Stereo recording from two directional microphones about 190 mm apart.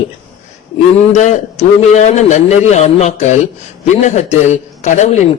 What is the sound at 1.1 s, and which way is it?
A man's voice, 40° left (ahead or behind).